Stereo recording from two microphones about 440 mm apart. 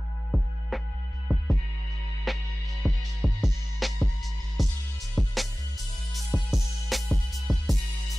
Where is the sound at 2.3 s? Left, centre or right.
Centre.